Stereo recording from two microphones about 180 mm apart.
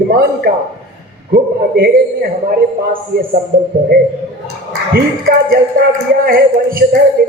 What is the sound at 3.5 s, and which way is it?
Speech, 50° right (ahead or behind).